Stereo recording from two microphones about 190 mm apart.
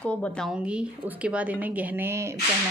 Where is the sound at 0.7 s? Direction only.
5° right (ahead or behind).